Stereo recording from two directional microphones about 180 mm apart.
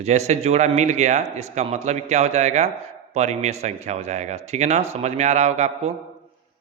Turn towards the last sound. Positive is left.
turn(degrees=-40)  # may be behind; listen again after turning